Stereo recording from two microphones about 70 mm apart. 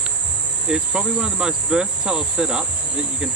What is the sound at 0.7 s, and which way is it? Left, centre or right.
Speech, centre.